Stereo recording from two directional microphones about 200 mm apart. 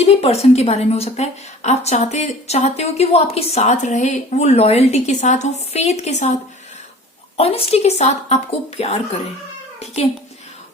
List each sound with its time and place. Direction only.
0.0 s a woman's voice: 30° left (ahead or behind)